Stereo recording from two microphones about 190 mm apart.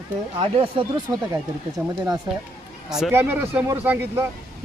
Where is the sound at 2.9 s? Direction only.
Centre (ahead or behind).